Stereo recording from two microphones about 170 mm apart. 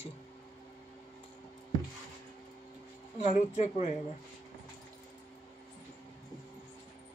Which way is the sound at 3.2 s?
40° left (ahead or behind).